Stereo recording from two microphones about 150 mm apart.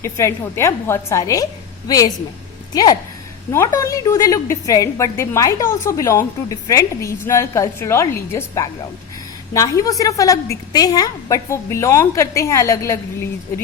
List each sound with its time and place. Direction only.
0.0 s a woman's voice: 20° left (ahead or behind)